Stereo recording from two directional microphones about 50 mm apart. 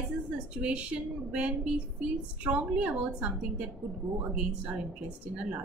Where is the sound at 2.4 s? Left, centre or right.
Right.